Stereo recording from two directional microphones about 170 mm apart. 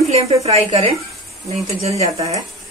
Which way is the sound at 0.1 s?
35° right (ahead or behind).